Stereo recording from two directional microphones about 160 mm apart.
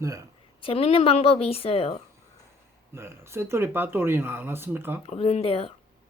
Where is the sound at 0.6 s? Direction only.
35° left (ahead or behind).